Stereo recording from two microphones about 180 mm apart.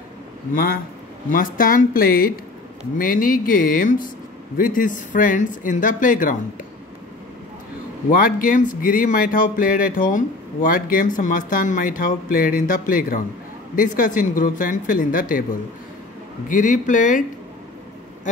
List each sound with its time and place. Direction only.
1.3 s speech: 50° left (ahead or behind)
8.1 s speech: 50° left (ahead or behind)